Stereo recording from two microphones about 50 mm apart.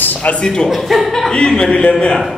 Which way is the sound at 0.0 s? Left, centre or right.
Left.